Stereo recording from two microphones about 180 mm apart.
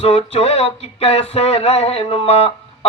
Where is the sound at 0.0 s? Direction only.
35° left (ahead or behind).